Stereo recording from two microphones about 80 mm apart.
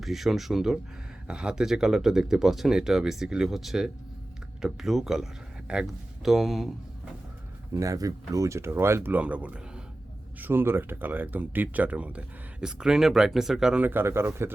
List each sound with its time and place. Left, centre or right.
0.0 s speech: centre
7.7 s speech: right
9.1 s speech: centre
10.4 s speech: right; by 13.8 s centre
13.8 s speech: right